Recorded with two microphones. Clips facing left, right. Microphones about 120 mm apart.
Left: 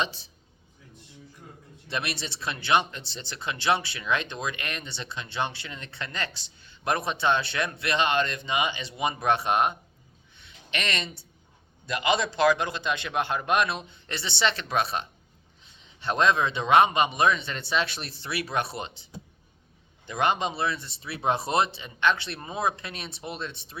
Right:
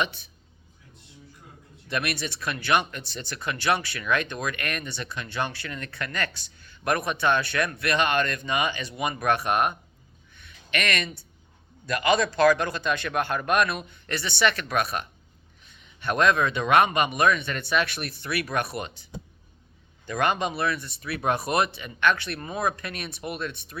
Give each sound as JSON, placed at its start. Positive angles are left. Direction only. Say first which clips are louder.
{"t": 1.9, "sound": "speech", "louder": "right 3 dB", "side_deg": 25}
{"t": 10.3, "sound": "a sound", "louder": "right 4 dB", "side_deg": 25}
{"t": 11.9, "sound": "speech", "louder": "right 3 dB", "side_deg": 20}
{"t": 20.1, "sound": "speech", "louder": "right 1 dB", "side_deg": 20}